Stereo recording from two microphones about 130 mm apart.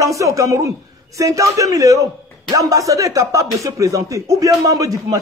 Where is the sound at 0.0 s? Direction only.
25° right (ahead or behind).